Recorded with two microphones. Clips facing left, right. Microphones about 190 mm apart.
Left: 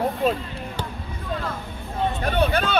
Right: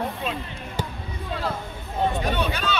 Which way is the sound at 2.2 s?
55° left (ahead or behind).